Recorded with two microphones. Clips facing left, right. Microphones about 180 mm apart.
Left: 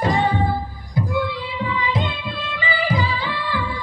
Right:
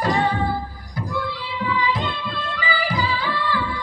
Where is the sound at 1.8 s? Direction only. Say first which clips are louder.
Even; 25° left (ahead or behind).